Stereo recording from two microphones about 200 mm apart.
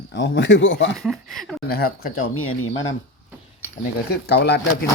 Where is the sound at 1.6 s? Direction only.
50° left (ahead or behind).